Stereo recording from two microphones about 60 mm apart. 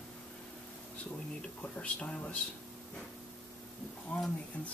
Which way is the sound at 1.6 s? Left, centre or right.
Left.